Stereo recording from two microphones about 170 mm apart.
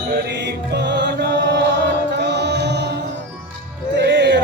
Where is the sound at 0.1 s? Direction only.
80° right.